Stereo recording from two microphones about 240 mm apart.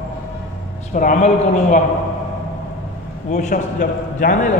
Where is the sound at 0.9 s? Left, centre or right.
Left.